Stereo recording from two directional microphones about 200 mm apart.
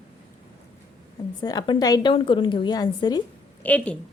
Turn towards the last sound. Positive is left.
turn(degrees=5)  # may be behind; listen again after turning